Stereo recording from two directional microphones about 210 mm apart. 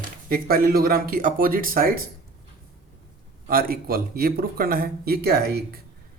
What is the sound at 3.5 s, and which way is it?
Speech, 45° right (ahead or behind).